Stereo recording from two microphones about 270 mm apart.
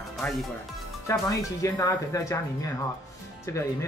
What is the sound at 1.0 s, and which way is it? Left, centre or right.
Speech, centre.